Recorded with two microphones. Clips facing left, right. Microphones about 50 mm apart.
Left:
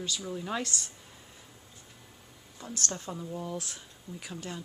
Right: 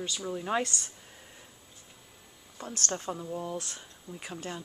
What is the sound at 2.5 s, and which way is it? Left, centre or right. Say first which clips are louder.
Speech: right 2 dB; right.